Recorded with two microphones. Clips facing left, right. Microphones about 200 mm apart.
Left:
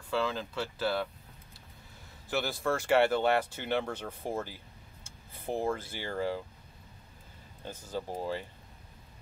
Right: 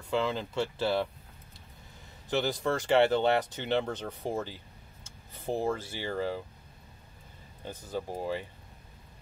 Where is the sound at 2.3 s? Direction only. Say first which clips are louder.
Right 2 dB; 20° right (ahead or behind).